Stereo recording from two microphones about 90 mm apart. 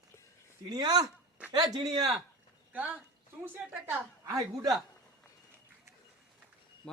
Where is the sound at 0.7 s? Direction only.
50° right (ahead or behind).